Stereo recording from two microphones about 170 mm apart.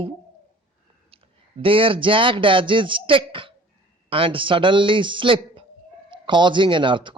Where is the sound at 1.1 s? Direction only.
35° right (ahead or behind).